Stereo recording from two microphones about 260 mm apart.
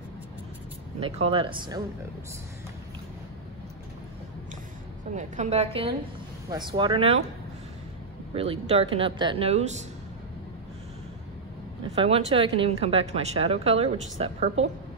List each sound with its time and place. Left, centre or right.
1.0 s speech: right
5.1 s speech: right
8.3 s speech: right
11.9 s speech: right